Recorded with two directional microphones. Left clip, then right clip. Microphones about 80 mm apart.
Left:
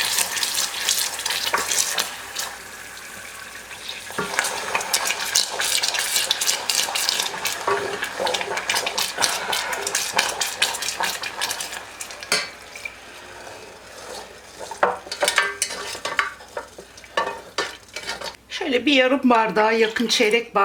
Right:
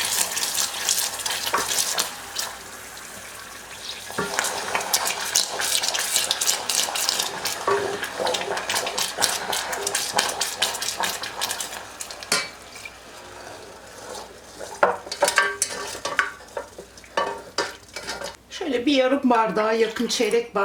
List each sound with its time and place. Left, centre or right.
0.0 s water tap: centre
3.8 s frying: centre
15.1 s a sound: centre
17.2 s stir: centre
18.6 s speech: left